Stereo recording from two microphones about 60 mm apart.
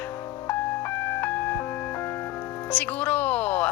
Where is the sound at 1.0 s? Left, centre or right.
Left.